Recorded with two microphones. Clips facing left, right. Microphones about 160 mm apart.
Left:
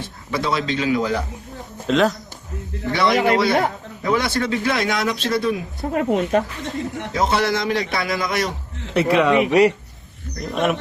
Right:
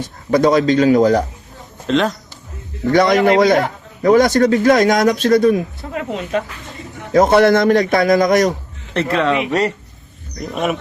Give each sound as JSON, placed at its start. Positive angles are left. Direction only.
{"t": 0.0, "sound": "speech", "side_deg": -45}
{"t": 1.9, "sound": "speech", "side_deg": 0}
{"t": 2.9, "sound": "speech", "side_deg": -45}
{"t": 5.8, "sound": "speech", "side_deg": 35}
{"t": 7.1, "sound": "speech", "side_deg": -50}
{"t": 8.9, "sound": "speech", "side_deg": 10}
{"t": 10.5, "sound": "speech", "side_deg": 0}